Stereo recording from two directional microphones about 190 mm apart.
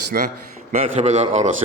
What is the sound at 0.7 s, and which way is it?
Speech, 40° right (ahead or behind).